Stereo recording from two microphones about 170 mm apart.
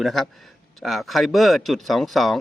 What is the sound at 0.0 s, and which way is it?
A man's voice, centre (ahead or behind).